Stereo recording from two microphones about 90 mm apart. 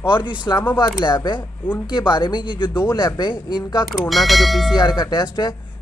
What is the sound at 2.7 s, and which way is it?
Speech, 30° left (ahead or behind).